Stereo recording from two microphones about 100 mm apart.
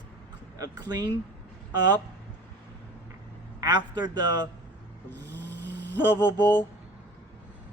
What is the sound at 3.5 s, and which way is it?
Speech, 45° right (ahead or behind).